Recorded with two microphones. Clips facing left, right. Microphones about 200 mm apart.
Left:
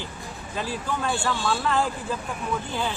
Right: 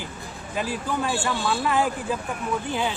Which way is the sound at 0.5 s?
10° right (ahead or behind).